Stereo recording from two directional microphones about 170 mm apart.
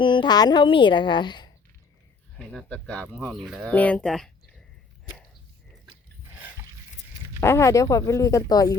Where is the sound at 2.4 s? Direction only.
5° left (ahead or behind).